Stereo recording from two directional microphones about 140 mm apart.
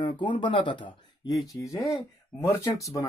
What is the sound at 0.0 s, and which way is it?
Speech, 35° left (ahead or behind).